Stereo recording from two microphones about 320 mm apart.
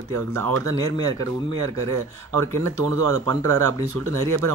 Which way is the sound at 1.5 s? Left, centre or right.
Right.